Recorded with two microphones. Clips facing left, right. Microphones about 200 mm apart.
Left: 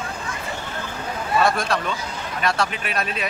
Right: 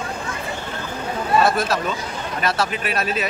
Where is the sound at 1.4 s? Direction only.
5° right (ahead or behind).